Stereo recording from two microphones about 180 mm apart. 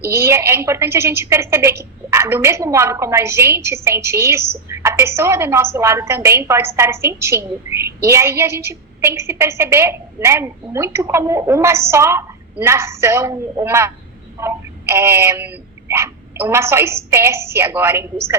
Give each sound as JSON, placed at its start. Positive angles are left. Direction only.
{"t": 0.1, "sound": "a woman's voice", "side_deg": -15}